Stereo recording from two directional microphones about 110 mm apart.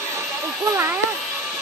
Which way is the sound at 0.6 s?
25° right (ahead or behind).